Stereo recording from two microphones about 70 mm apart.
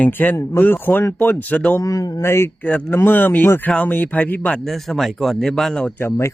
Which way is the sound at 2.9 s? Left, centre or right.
Left.